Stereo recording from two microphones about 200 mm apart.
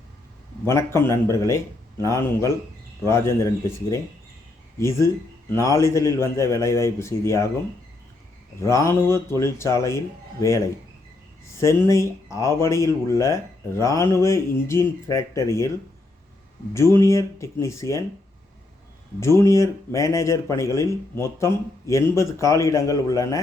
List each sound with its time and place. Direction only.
0.6 s speech: 10° left (ahead or behind)
8.6 s speech: 15° left (ahead or behind)
11.6 s speech: 15° left (ahead or behind)
16.7 s speech: 15° left (ahead or behind)
19.2 s speech: 15° left (ahead or behind)